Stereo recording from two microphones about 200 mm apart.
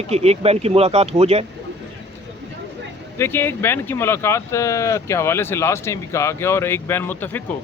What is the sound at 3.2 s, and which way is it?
A man's voice, 10° left (ahead or behind).